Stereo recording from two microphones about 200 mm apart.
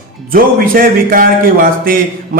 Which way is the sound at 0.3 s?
45° right (ahead or behind).